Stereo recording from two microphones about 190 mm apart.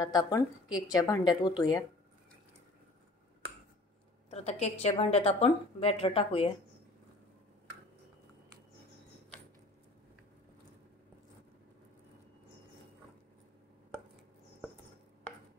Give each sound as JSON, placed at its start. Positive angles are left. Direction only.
{"t": 0.0, "sound": "speech", "side_deg": 20}
{"t": 4.3, "sound": "a woman's voice", "side_deg": 35}